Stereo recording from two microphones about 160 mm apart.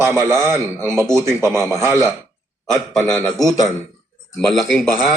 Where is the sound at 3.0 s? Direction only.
20° left (ahead or behind).